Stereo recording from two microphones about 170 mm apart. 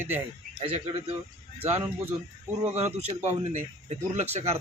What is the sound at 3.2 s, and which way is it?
Speech, 40° right (ahead or behind).